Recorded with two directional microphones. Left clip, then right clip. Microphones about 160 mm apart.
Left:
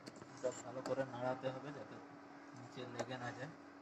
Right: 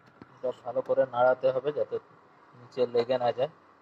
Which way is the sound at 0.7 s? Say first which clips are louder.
Right 15 dB; 20° right (ahead or behind).